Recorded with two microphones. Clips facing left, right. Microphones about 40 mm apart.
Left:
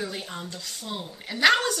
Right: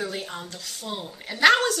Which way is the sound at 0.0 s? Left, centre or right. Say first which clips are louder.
Right 2 dB; centre.